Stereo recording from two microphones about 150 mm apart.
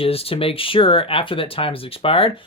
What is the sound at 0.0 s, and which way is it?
Speech, 40° left (ahead or behind).